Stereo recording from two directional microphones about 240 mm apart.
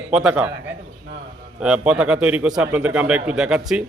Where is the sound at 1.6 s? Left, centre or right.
Centre.